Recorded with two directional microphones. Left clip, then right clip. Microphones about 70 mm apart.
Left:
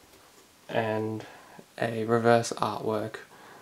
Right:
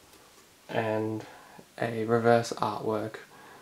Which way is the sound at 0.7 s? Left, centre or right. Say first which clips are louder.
Left 1 dB; left.